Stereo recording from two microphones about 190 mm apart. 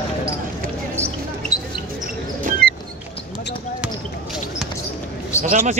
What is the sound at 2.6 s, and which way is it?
Music, 55° right (ahead or behind).